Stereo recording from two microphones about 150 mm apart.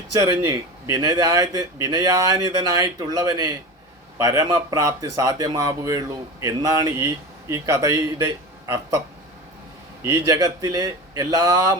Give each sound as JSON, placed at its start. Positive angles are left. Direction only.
{"t": 0.1, "sound": "speech", "side_deg": -25}
{"t": 10.0, "sound": "speech", "side_deg": -20}